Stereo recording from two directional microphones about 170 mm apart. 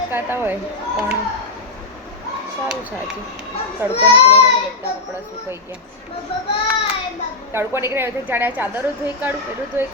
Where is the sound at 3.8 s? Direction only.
15° right (ahead or behind).